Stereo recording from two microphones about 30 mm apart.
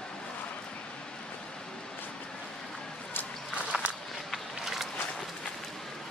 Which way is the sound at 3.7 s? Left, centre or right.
Right.